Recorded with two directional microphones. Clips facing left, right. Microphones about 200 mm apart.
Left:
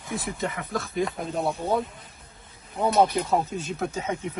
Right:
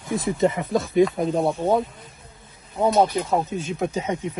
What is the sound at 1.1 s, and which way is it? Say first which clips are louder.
Speech: right 6 dB; 25° right (ahead or behind).